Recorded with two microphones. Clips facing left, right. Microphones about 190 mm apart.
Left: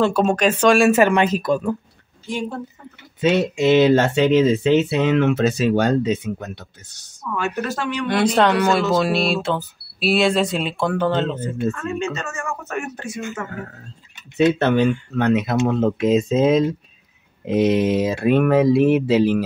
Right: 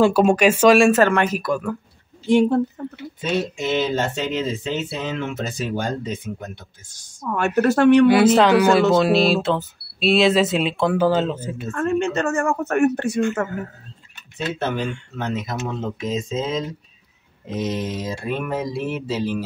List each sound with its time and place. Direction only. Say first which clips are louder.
0.0 s speech: right 2 dB; 10° right (ahead or behind)
0.9 s speech: left 2 dB; 15° left (ahead or behind)
2.2 s speech: right 10 dB; 65° right (ahead or behind)
3.2 s speech: left 6 dB; 70° left (ahead or behind)
7.2 s speech: right 6 dB; 55° right (ahead or behind)
8.1 s speech: right 3 dB; 5° right (ahead or behind)
11.7 s speech: right 5 dB; 55° right (ahead or behind)
14.6 s speech: left 7 dB; 65° left (ahead or behind)